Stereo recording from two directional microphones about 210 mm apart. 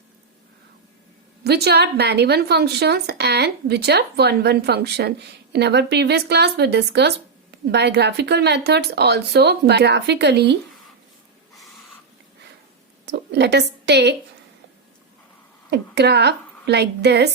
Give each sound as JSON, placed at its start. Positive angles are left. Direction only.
{"t": 1.5, "sound": "a woman's voice", "side_deg": -50}
{"t": 13.1, "sound": "a woman's voice", "side_deg": -55}
{"t": 15.7, "sound": "a woman's voice", "side_deg": -50}